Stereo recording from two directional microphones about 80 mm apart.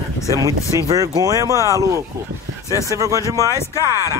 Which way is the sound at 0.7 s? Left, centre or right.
Right.